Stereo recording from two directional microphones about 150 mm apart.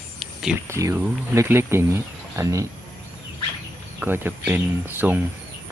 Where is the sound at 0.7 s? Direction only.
20° right (ahead or behind).